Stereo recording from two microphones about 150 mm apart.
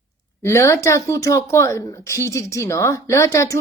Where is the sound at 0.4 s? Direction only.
20° left (ahead or behind).